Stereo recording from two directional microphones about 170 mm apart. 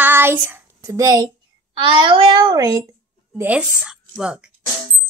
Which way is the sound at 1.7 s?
30° right (ahead or behind).